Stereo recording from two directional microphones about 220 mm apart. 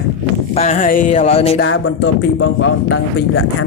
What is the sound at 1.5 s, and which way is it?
Speech, 60° left (ahead or behind).